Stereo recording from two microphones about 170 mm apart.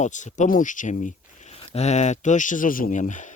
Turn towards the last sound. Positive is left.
turn(degrees=45)  # may be behind; listen again after turning